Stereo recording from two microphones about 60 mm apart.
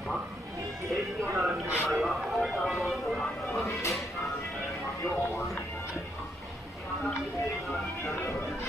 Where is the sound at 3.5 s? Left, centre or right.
Left.